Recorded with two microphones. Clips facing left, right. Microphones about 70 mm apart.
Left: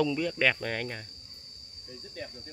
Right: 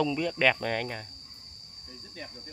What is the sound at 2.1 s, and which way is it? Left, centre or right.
Speech, centre.